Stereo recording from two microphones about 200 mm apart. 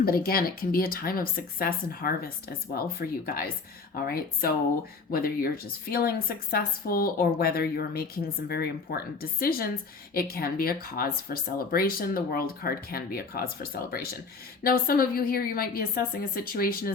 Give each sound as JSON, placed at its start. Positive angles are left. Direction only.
{"t": 0.0, "sound": "speech", "side_deg": 50}